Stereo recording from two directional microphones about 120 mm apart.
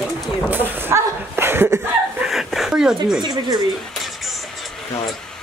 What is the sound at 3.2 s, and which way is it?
Speech, 35° right (ahead or behind).